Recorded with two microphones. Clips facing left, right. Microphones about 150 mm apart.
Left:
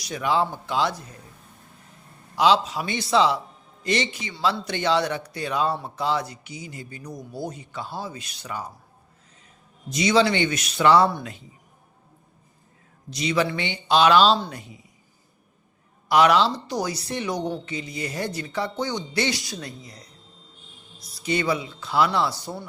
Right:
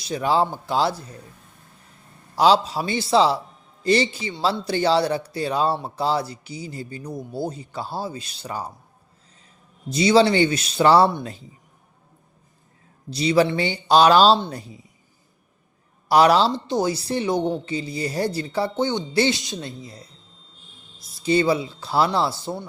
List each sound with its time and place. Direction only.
0.0 s speech: 30° right (ahead or behind)
2.3 s speech: 35° right (ahead or behind)
9.9 s speech: 30° right (ahead or behind)
13.1 s speech: 30° right (ahead or behind)
16.0 s speech: 35° right (ahead or behind)
21.2 s speech: 30° right (ahead or behind)